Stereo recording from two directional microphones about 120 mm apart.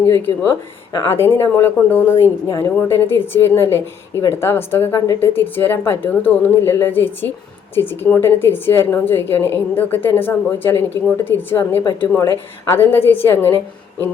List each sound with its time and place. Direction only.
0.1 s a woman's voice: 15° left (ahead or behind)
2.5 s a woman's voice: 30° left (ahead or behind)
2.8 s a woman's voice: 20° left (ahead or behind)